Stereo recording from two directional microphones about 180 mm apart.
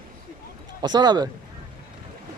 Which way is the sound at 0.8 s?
25° right (ahead or behind).